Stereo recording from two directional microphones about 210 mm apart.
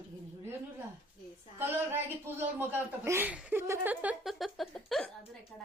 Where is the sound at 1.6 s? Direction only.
10° right (ahead or behind).